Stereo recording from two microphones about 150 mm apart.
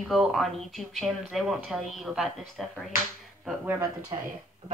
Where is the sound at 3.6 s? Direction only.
15° right (ahead or behind).